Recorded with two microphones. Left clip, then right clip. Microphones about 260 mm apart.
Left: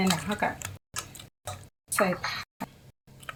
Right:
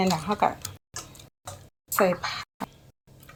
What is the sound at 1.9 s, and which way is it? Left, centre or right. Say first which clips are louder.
Speech: right 3 dB; centre.